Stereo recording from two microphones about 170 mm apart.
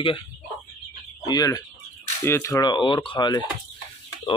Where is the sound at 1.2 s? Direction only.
20° left (ahead or behind).